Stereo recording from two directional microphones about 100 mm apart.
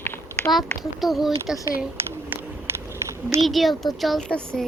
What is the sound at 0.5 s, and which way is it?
Speech, centre (ahead or behind).